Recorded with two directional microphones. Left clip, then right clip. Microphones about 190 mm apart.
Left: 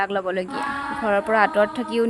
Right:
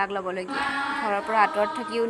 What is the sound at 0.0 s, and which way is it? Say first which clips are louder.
A woman's voice: left 4 dB; 40° left (ahead or behind).